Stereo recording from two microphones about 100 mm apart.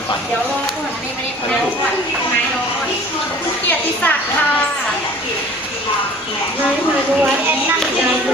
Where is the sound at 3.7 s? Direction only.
15° left (ahead or behind).